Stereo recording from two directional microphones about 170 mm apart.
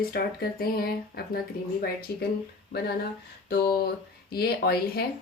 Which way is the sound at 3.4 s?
65° left (ahead or behind).